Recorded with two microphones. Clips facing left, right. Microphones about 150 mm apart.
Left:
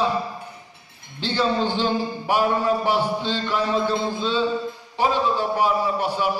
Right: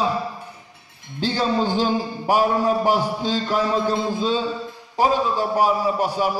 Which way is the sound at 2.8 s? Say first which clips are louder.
Right 2 dB; 40° right (ahead or behind).